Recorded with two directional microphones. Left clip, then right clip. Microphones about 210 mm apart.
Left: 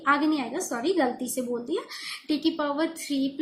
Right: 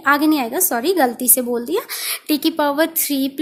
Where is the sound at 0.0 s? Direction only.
50° right (ahead or behind).